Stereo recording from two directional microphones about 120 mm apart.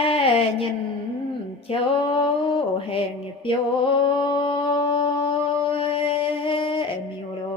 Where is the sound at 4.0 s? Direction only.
45° left (ahead or behind).